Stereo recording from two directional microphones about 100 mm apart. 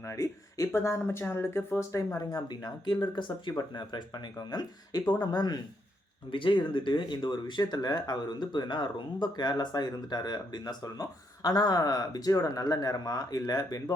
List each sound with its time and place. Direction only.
0.0 s speech: 30° left (ahead or behind)